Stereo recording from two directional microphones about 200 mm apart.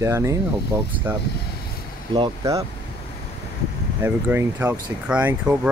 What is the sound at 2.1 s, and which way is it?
Speech, 20° right (ahead or behind).